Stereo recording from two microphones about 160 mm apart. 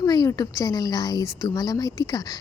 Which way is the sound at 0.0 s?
20° left (ahead or behind).